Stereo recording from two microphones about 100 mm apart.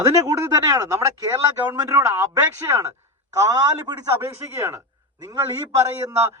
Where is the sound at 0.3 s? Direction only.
30° right (ahead or behind).